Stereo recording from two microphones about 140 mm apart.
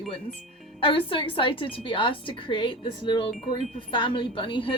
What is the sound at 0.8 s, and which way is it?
A woman's voice, 40° left (ahead or behind).